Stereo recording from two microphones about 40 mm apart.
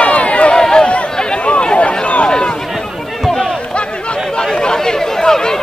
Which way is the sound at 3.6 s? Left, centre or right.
Left.